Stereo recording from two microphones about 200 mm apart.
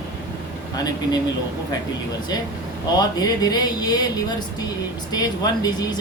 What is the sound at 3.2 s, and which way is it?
Speech, 20° left (ahead or behind).